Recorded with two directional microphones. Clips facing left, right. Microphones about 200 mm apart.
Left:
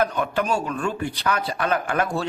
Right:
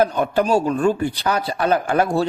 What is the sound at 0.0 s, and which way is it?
A man's voice, 35° right (ahead or behind).